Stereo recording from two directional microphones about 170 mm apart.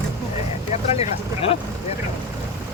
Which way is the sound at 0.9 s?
35° left (ahead or behind).